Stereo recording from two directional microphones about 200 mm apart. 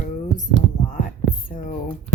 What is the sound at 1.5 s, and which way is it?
Speech, 40° left (ahead or behind).